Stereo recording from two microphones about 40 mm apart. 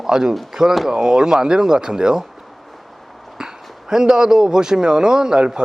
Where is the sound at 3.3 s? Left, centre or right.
Centre.